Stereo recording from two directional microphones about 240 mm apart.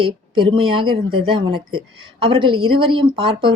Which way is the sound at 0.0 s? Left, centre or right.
Right.